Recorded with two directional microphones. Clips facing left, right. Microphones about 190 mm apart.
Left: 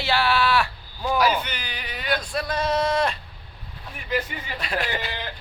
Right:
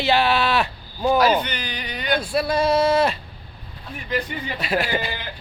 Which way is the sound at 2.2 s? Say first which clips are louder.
Right 6 dB; 10° right (ahead or behind).